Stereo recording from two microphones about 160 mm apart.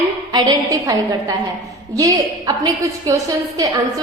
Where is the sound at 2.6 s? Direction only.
25° right (ahead or behind).